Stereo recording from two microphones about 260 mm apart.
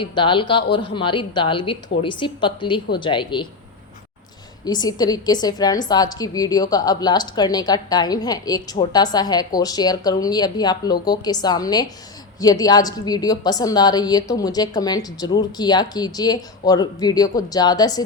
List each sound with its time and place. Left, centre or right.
0.0 s a woman's voice: centre
4.6 s a woman's voice: centre